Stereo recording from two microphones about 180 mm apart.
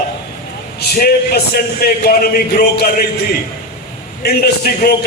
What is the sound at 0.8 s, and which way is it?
A man's voice, 60° left (ahead or behind).